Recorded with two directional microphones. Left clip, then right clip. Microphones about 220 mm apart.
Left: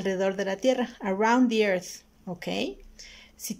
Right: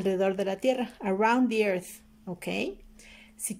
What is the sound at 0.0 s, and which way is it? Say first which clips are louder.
Speech: even; 10° right (ahead or behind).